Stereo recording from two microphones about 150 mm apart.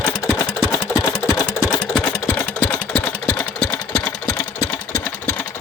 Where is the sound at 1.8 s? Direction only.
10° left (ahead or behind).